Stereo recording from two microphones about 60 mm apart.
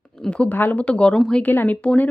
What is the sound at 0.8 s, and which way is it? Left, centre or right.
Speech, centre.